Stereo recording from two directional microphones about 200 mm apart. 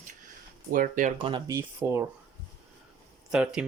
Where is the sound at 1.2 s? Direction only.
25° right (ahead or behind).